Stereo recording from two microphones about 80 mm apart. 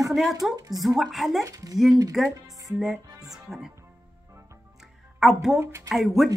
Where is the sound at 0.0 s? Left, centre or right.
Centre.